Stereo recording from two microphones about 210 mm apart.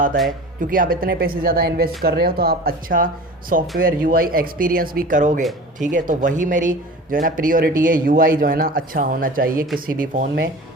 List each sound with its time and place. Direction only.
0.2 s speech: centre (ahead or behind)
0.6 s a man's voice: 40° right (ahead or behind)